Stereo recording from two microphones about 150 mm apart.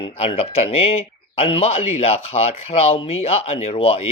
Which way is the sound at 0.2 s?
40° left (ahead or behind).